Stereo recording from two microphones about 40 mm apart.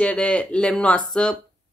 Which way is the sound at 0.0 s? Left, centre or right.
Left.